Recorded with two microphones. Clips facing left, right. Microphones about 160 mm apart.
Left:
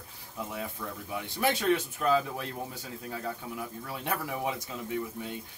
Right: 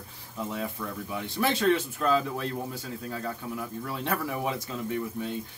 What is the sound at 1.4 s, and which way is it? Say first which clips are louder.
Speech: right 2 dB; 15° left (ahead or behind).